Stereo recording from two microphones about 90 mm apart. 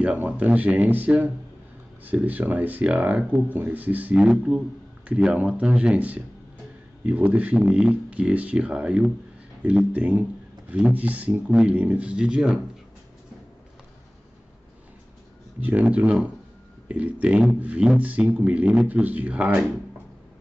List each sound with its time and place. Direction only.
0.0 s speech: 15° right (ahead or behind)
15.6 s speech: 15° right (ahead or behind)